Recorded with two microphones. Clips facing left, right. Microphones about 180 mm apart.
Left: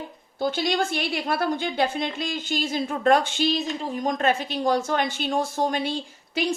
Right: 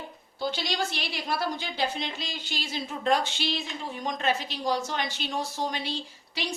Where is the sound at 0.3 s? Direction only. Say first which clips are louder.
Left 6 dB; 50° left (ahead or behind).